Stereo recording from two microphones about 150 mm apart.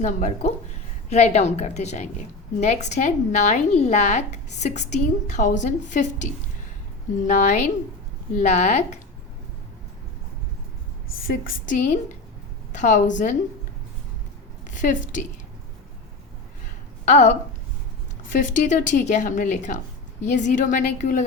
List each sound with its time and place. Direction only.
0.0 s speech: 50° left (ahead or behind)
7.3 s speech: 55° left (ahead or behind)
11.3 s speech: 65° left (ahead or behind)
14.8 s speech: 55° left (ahead or behind)
17.1 s speech: 50° left (ahead or behind)